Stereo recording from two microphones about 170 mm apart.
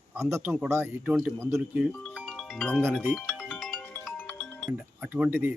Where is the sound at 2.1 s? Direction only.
Centre (ahead or behind).